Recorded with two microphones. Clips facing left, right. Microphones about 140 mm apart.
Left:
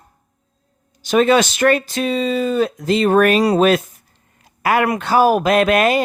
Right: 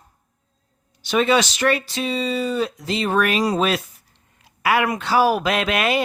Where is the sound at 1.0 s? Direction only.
45° left (ahead or behind).